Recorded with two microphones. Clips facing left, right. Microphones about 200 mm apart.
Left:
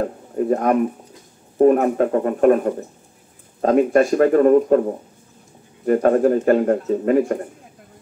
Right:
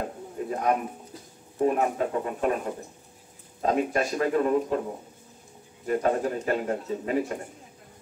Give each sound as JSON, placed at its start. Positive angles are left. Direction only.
{"t": 0.4, "sound": "speech", "side_deg": 50}
{"t": 5.9, "sound": "speech", "side_deg": 55}